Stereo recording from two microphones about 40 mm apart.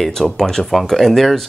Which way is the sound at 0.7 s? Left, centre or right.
Centre.